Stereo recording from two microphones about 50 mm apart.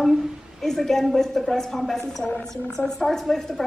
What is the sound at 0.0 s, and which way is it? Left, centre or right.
A woman's voice, centre.